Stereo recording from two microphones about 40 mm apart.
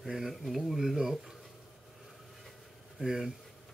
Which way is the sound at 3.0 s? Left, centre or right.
Centre.